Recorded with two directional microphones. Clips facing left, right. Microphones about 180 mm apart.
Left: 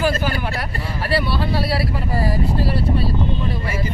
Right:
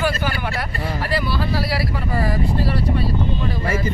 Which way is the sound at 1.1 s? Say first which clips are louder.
Left 3 dB; 30° left (ahead or behind).